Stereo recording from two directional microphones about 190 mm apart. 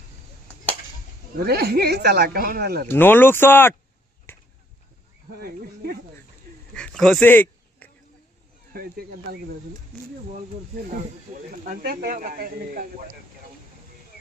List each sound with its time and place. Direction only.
1.5 s speech: 55° right (ahead or behind)
2.8 s speech: 10° left (ahead or behind)
4.3 s chop: 10° left (ahead or behind)
5.4 s speech: 55° right (ahead or behind)
6.7 s a sound: 5° left (ahead or behind)
8.7 s speech: 50° right (ahead or behind)
11.6 s speech: 50° right (ahead or behind)